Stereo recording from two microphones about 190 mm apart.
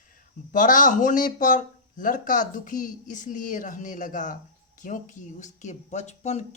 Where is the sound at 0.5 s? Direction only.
45° left (ahead or behind).